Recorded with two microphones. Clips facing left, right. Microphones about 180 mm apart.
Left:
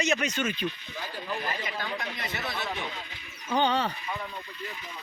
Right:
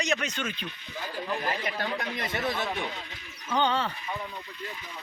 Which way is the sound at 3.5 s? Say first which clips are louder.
Left 1 dB; 15° left (ahead or behind).